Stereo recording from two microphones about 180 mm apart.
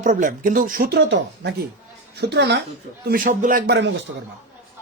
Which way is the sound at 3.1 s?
50° right (ahead or behind).